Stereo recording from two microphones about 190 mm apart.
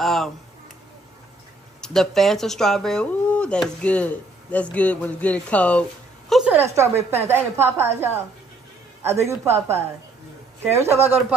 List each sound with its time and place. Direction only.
0.0 s speech: centre (ahead or behind)
1.8 s speech: centre (ahead or behind)
6.5 s a woman's voice: 15° right (ahead or behind)